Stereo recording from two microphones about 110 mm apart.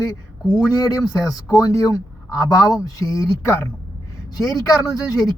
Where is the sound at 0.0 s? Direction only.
40° left (ahead or behind).